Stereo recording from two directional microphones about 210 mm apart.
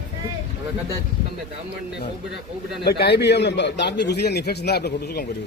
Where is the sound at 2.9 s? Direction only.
50° left (ahead or behind).